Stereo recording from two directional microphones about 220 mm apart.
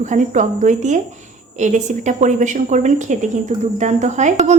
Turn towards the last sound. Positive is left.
turn(degrees=-30)  # may be behind; listen again after turning